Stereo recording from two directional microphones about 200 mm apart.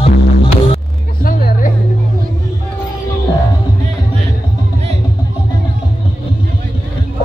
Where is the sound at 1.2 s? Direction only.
45° left (ahead or behind).